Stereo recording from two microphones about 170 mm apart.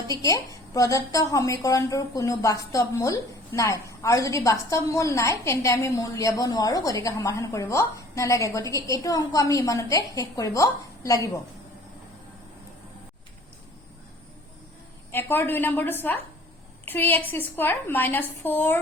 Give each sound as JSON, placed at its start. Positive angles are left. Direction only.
{"t": 0.1, "sound": "a woman's voice", "side_deg": 20}
{"t": 15.1, "sound": "a woman's voice", "side_deg": 10}